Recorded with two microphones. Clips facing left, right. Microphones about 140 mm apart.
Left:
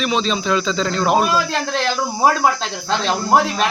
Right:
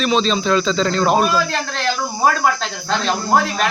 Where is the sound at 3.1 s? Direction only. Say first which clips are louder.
Left 1 dB; 20° left (ahead or behind).